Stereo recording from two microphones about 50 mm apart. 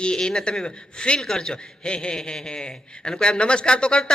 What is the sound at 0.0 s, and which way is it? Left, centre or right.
A man's voice, centre.